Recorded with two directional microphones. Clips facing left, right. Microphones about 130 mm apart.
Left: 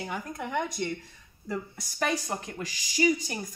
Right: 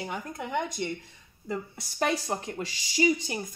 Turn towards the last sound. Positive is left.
turn(degrees=-25)  # may be behind; listen again after turning